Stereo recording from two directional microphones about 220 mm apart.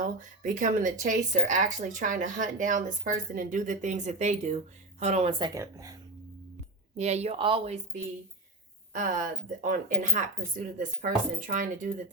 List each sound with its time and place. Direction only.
0.0 s speech: 35° right (ahead or behind); by 6.0 s 15° right (ahead or behind)
6.9 s speech: 30° right (ahead or behind)